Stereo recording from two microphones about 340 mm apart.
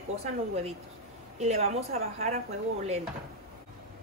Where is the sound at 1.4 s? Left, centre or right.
Centre.